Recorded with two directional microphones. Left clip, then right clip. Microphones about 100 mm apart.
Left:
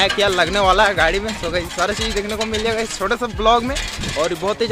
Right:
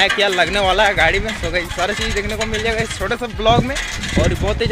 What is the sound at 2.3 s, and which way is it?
Speech, 30° left (ahead or behind).